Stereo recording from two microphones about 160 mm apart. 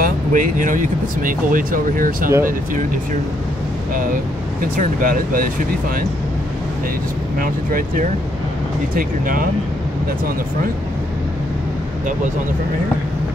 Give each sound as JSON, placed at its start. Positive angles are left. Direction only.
{"t": 0.0, "sound": "speech", "side_deg": -55}
{"t": 3.9, "sound": "speech", "side_deg": -60}
{"t": 7.3, "sound": "speech", "side_deg": -60}